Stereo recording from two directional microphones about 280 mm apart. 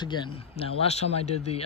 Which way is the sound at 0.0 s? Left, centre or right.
Centre.